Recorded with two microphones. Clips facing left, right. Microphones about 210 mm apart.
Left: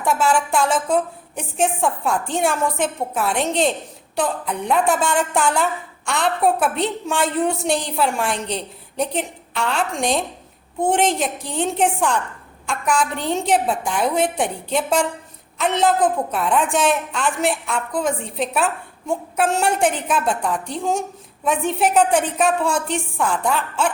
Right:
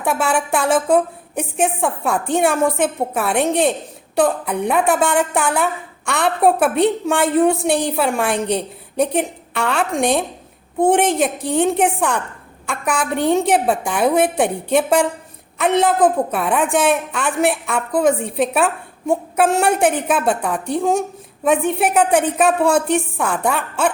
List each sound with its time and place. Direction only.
0.0 s a woman's voice: 60° right (ahead or behind)